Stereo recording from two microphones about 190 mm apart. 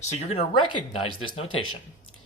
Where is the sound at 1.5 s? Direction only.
90° left.